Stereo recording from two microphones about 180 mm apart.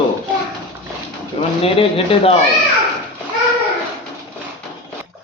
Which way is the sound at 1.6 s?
30° left (ahead or behind).